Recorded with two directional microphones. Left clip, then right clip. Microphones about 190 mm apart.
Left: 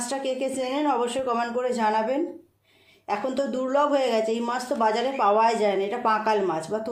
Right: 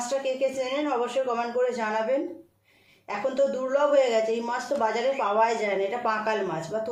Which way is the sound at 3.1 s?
50° left (ahead or behind).